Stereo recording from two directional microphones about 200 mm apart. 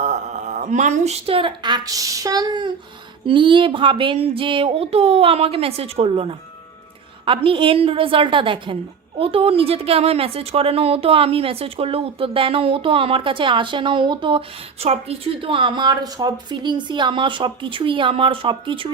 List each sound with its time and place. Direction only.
0.0 s a woman's voice: 35° right (ahead or behind)